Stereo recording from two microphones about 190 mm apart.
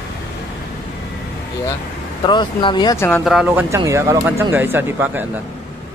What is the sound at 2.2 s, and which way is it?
Speech, 25° left (ahead or behind).